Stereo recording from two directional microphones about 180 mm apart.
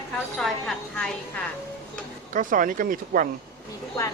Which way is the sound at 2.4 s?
50° right (ahead or behind).